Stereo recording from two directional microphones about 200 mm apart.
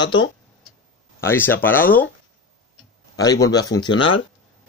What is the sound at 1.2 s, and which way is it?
Speech, 10° left (ahead or behind).